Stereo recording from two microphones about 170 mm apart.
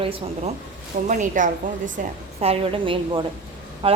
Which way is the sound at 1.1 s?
50° right (ahead or behind).